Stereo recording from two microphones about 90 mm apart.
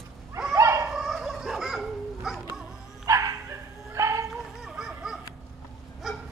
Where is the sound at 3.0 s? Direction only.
35° right (ahead or behind).